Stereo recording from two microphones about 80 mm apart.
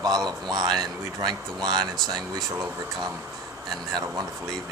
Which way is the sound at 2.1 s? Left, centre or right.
Right.